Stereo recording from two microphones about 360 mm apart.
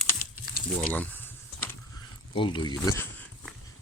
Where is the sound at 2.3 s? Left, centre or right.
Centre.